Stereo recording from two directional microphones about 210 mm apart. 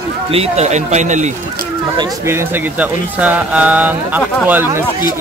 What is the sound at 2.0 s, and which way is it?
Speech, 10° right (ahead or behind).